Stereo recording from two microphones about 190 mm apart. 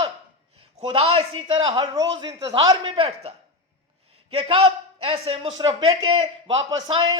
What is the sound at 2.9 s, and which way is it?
Speech, 35° right (ahead or behind).